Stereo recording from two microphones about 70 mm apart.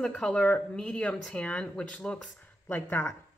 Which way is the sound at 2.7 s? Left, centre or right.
Left.